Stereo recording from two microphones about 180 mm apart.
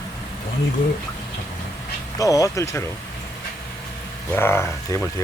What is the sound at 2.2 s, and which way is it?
Speech, 20° left (ahead or behind).